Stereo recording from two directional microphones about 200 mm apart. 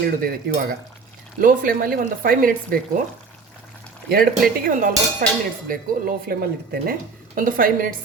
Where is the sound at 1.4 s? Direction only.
45° right (ahead or behind).